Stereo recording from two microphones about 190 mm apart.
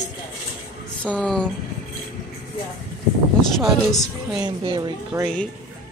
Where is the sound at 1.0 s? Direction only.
5° left (ahead or behind).